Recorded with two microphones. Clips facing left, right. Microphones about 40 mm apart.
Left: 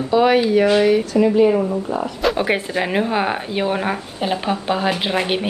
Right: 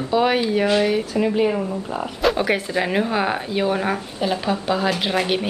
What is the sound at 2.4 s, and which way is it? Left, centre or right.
Speech, centre.